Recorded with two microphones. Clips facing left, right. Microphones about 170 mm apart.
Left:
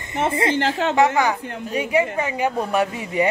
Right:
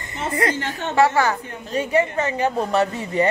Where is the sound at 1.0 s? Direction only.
15° left (ahead or behind).